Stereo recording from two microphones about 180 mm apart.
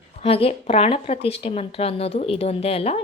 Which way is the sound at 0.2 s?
30° left (ahead or behind).